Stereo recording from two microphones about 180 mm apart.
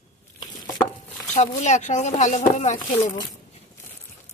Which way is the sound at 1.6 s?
40° left (ahead or behind).